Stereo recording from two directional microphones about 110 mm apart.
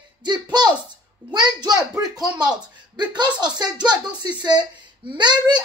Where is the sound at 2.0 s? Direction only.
35° right (ahead or behind).